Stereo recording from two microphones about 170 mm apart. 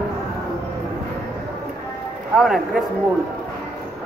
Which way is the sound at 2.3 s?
Centre (ahead or behind).